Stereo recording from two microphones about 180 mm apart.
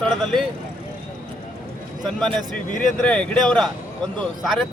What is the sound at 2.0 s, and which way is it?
Speech, 5° left (ahead or behind).